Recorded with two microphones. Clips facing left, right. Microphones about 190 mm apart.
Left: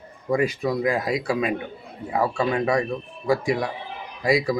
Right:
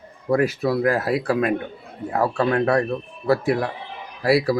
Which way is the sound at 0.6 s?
15° left (ahead or behind).